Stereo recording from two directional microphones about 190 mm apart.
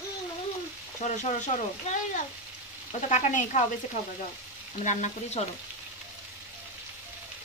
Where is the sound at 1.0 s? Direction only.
40° left (ahead or behind).